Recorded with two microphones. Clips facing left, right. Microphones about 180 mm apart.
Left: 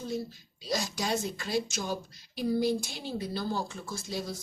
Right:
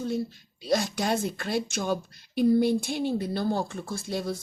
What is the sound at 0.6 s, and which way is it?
Speech, 55° right (ahead or behind).